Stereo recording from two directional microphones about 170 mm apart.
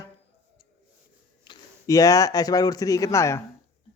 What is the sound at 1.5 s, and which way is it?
Speech, 20° left (ahead or behind).